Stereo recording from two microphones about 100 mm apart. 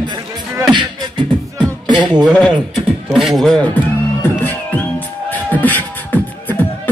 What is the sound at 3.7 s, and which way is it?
Music, 20° left (ahead or behind).